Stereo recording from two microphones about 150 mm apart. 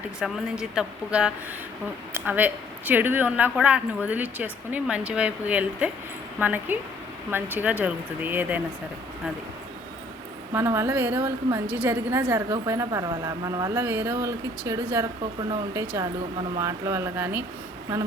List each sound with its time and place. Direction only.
0.2 s a woman's voice: 5° right (ahead or behind)
10.5 s a woman's voice: 15° right (ahead or behind)